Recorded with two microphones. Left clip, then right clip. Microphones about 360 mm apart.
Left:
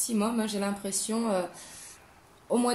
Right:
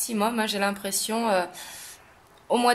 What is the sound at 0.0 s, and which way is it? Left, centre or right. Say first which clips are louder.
Speech: right 5 dB; right.